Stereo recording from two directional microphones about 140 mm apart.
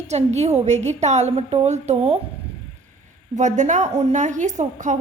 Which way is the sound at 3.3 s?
60° right (ahead or behind).